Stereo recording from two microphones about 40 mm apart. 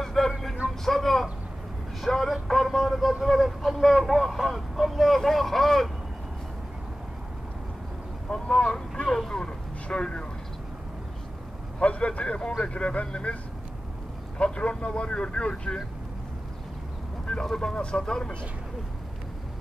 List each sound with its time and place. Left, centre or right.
0.0 s vehicle: centre
2.0 s speech: centre
8.3 s speech: left
9.1 s a sound: centre
9.8 s speech: left
11.8 s vehicle: left
12.6 s speech: left
14.4 s speech: left
17.3 s speech: centre